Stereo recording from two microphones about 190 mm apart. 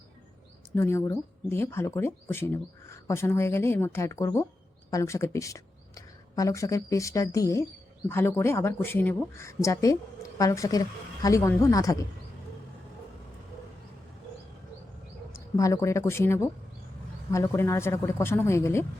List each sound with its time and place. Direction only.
0.8 s speech: 15° left (ahead or behind)
15.3 s speech: 15° left (ahead or behind)